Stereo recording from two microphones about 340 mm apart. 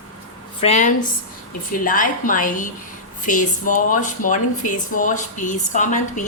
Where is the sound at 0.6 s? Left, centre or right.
Left.